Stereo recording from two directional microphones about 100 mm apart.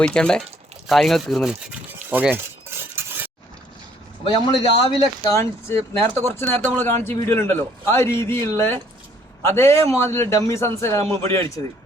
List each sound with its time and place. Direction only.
0.0 s speech: 10° left (ahead or behind)
1.6 s stir: 15° right (ahead or behind)
4.3 s a man's voice: 60° left (ahead or behind)
5.3 s a man's voice: 25° left (ahead or behind)